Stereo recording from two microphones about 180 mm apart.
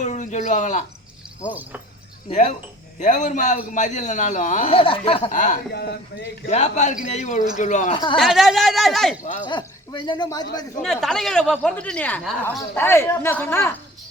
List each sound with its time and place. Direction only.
0.0 s speech: 40° left (ahead or behind)
3.0 s a man's voice: 45° left (ahead or behind)
4.7 s a man's voice: 30° left (ahead or behind)
5.3 s a man's voice: 45° left (ahead or behind)
5.7 s speech: 65° left (ahead or behind)
6.5 s a man's voice: 40° left (ahead or behind)
7.9 s speech: 30° left (ahead or behind)
8.2 s speech: centre (ahead or behind)
9.2 s a man's voice: 45° left (ahead or behind)
9.5 s speech: 25° left (ahead or behind)
10.8 s speech: centre (ahead or behind)